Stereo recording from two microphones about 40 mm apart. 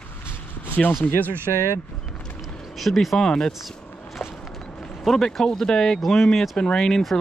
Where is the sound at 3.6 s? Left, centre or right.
Centre.